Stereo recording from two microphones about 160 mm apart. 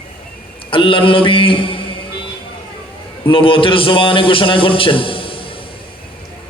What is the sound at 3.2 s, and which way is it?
A man's voice, 35° left (ahead or behind).